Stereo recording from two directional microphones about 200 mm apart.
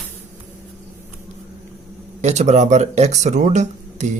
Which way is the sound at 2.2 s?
35° right (ahead or behind).